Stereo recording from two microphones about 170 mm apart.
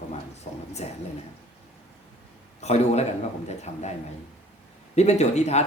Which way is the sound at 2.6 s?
40° left (ahead or behind).